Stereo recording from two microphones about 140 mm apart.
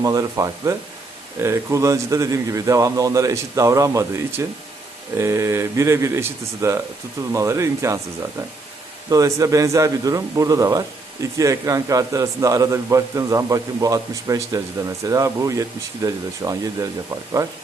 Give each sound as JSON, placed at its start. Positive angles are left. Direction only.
{"t": 0.0, "sound": "a man's voice", "side_deg": -25}
{"t": 9.0, "sound": "a man's voice", "side_deg": -25}